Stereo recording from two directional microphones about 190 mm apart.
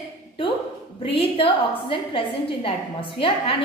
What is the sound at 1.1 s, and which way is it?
A woman's voice, 30° left (ahead or behind).